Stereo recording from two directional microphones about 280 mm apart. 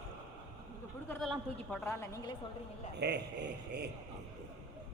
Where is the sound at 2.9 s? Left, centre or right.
Right.